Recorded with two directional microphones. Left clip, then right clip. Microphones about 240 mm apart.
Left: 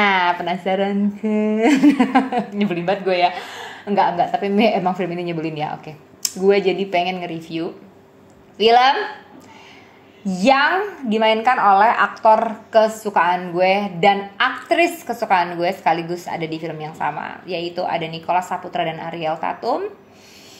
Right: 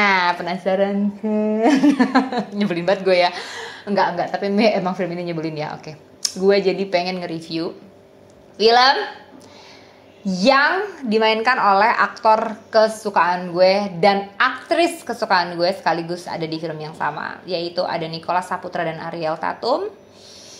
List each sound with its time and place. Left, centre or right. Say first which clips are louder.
0.0 s a sound: even; right
0.7 s a woman's voice: right 1 dB; centre
2.7 s a woman's voice: right 3 dB; right
10.2 s a woman's voice: even; centre